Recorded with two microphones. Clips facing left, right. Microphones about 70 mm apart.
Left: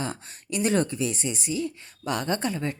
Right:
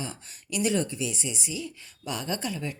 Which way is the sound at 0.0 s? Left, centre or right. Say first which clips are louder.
Left 5 dB; left.